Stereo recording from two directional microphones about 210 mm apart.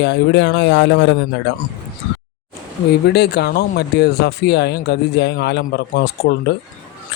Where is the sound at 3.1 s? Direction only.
50° left (ahead or behind).